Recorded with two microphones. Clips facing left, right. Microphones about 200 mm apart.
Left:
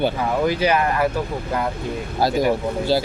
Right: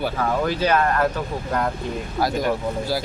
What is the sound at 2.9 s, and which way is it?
Speech, 25° left (ahead or behind).